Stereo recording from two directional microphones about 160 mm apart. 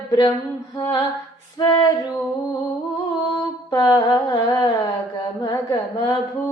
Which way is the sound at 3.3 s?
25° left (ahead or behind).